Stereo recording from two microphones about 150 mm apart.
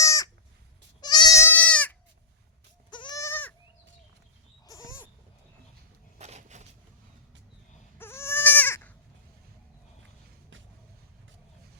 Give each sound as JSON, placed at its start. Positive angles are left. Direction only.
{"t": 0.0, "sound": "goat", "side_deg": 20}
{"t": 2.9, "sound": "goat", "side_deg": 30}
{"t": 4.6, "sound": "dog", "side_deg": 25}
{"t": 6.1, "sound": "a sound", "side_deg": -50}
{"t": 7.9, "sound": "goat", "side_deg": 15}